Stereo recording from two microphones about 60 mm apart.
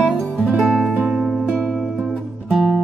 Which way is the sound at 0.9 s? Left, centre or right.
Centre.